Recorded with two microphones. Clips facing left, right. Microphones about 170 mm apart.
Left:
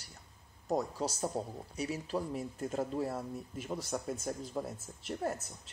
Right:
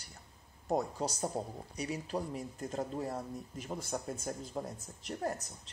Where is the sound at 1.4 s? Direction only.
5° left (ahead or behind).